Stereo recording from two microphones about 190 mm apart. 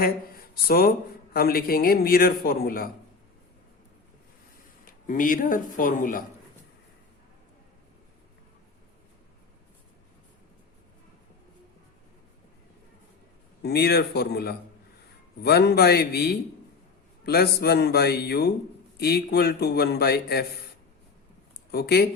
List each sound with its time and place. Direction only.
0.0 s speech: 50° left (ahead or behind)
4.9 s speech: 45° left (ahead or behind)
13.6 s a man's voice: 55° left (ahead or behind)
21.7 s a man's voice: 55° left (ahead or behind)